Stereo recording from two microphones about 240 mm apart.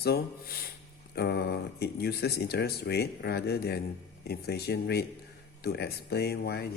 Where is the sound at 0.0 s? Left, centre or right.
Left.